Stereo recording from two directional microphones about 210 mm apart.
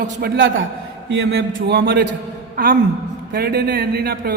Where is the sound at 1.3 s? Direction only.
65° right (ahead or behind).